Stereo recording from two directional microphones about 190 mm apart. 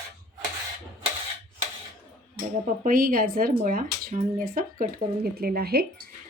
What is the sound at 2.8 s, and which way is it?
Speech, 50° right (ahead or behind).